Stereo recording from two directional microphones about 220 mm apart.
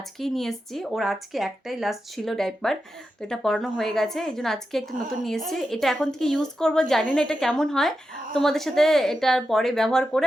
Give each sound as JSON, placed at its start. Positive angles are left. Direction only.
{"t": 0.2, "sound": "a woman's voice", "side_deg": 0}